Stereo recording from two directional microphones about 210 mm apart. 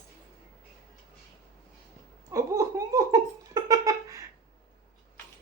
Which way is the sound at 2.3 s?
15° right (ahead or behind).